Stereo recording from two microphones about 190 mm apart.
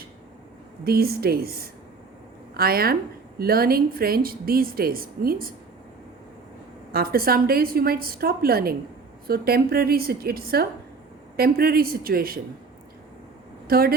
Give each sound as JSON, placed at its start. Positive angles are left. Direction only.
{"t": 0.9, "sound": "a woman's voice", "side_deg": -55}
{"t": 6.9, "sound": "a woman's voice", "side_deg": -55}
{"t": 13.7, "sound": "speech", "side_deg": -50}